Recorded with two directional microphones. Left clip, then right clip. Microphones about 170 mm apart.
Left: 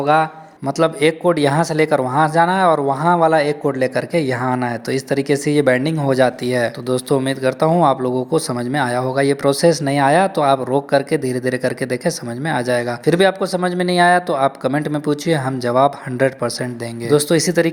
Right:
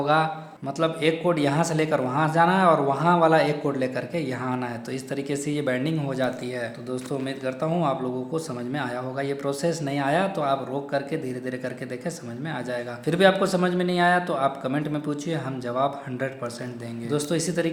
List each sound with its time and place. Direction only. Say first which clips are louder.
0.0 s a man's voice: left 7 dB; 40° left (ahead or behind)